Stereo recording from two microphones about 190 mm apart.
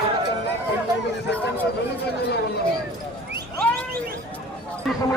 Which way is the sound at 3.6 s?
5° left (ahead or behind).